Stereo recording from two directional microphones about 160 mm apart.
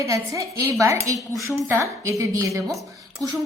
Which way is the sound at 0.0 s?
20° right (ahead or behind).